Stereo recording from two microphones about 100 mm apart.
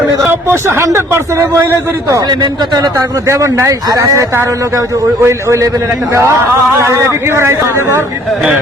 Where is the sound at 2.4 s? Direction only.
45° right (ahead or behind).